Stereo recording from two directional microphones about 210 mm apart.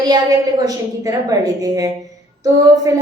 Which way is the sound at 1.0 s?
15° right (ahead or behind).